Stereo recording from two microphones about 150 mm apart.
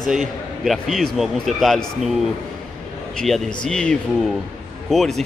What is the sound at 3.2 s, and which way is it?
A man's voice, 5° left (ahead or behind).